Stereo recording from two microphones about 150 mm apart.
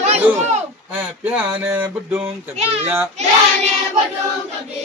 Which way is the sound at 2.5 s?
45° right (ahead or behind).